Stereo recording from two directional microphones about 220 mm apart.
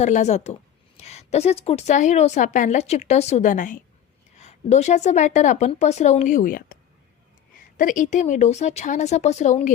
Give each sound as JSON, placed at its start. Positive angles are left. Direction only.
{"t": 0.0, "sound": "a woman's voice", "side_deg": 30}
{"t": 7.8, "sound": "a woman's voice", "side_deg": 40}